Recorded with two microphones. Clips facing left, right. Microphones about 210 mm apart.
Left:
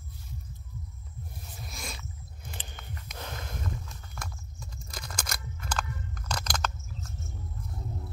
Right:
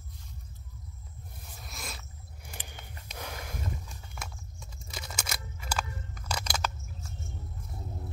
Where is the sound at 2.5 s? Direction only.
10° right (ahead or behind).